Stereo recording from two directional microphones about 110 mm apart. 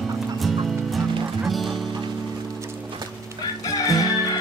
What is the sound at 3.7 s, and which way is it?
Music, 35° left (ahead or behind).